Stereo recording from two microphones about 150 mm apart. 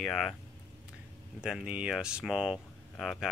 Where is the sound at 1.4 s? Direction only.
5° right (ahead or behind).